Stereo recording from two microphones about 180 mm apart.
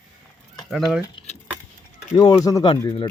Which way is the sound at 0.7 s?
Centre (ahead or behind).